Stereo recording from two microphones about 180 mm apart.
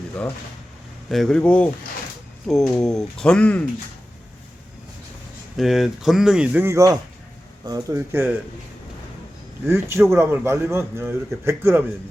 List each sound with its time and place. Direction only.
1.1 s speech: centre (ahead or behind)
5.5 s a man's voice: centre (ahead or behind)
9.6 s a man's voice: 15° right (ahead or behind)